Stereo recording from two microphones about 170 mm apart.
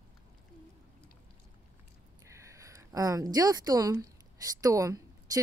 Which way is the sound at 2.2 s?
15° right (ahead or behind).